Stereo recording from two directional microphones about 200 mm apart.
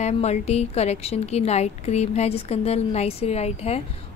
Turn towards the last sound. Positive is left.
turn(degrees=30)  # may be behind; listen again after turning